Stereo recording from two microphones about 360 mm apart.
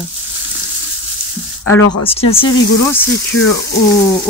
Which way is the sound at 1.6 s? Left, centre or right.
Left.